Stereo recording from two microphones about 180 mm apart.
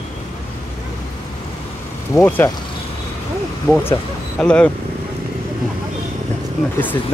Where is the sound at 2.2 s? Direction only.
10° left (ahead or behind).